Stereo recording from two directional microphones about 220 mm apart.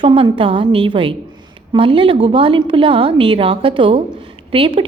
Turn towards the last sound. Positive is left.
turn(degrees=-25)  # may be behind; listen again after turning